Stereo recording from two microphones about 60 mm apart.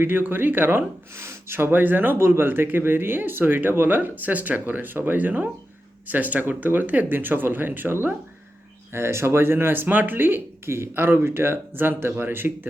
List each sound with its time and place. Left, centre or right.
0.0 s speech: right
1.1 s speech: right
2.1 s speech: right